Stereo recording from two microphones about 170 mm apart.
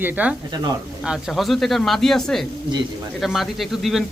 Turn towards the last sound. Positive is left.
turn(degrees=0)  # may be behind; listen again after turning